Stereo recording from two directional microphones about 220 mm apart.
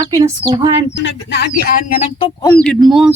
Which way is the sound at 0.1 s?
20° right (ahead or behind).